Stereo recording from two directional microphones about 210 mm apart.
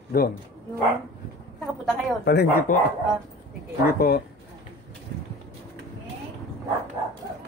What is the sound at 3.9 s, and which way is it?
Speech, 45° left (ahead or behind).